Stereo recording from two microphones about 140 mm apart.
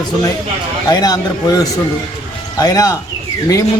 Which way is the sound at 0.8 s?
25° left (ahead or behind).